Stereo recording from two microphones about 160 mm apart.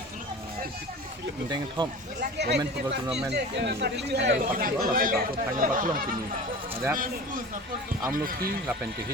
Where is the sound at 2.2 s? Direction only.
90° right; by 6.2 s 55° right (ahead or behind).